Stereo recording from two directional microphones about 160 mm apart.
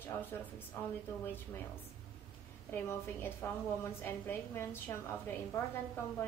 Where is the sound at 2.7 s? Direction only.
15° left (ahead or behind).